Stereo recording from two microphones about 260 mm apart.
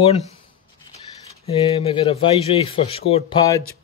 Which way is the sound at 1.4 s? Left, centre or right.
Left.